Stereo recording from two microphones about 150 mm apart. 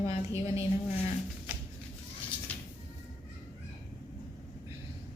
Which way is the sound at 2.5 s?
10° left (ahead or behind).